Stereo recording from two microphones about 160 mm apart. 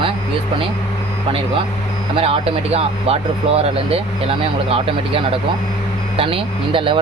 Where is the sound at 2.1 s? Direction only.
35° right (ahead or behind).